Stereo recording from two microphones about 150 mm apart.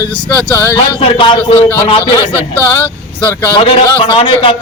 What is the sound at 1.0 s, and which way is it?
Speech, 35° left (ahead or behind).